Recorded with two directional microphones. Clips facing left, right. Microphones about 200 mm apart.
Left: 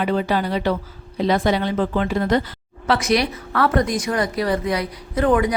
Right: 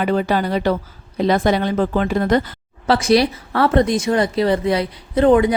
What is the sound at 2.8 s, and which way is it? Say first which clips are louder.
Speech: right 4 dB; 30° right (ahead or behind).